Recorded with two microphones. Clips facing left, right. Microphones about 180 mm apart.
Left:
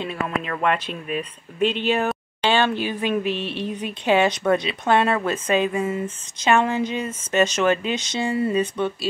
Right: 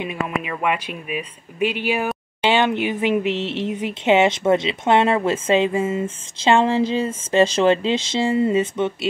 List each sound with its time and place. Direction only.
0.0 s speech: 10° right (ahead or behind)